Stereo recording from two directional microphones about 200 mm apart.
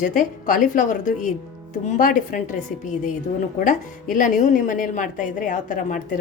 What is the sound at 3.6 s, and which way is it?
A woman's voice, 40° left (ahead or behind).